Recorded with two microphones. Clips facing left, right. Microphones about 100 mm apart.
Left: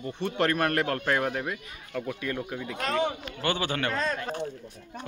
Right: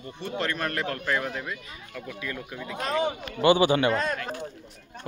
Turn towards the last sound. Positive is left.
turn(degrees=-10)  # may be behind; listen again after turning